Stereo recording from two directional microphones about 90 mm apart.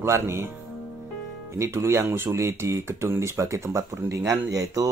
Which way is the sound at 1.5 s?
30° right (ahead or behind).